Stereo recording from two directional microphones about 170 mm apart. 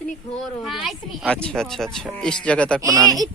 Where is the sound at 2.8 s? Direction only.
20° right (ahead or behind).